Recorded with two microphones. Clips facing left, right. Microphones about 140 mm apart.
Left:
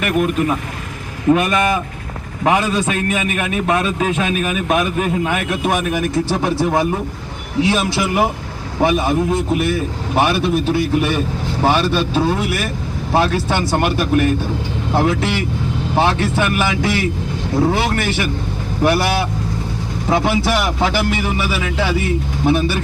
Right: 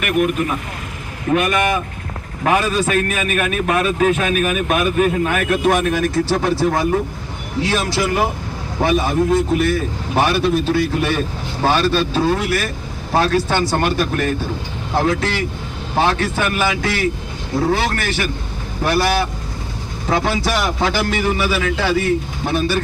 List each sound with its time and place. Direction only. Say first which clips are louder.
1.3 s a man's voice: left 2 dB; 25° left (ahead or behind)